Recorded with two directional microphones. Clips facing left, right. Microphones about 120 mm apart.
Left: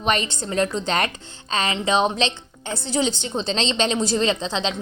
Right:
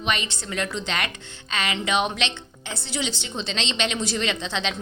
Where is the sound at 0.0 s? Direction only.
40° left (ahead or behind).